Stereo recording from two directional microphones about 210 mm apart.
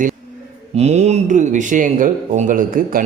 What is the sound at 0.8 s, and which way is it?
Speech, 30° right (ahead or behind).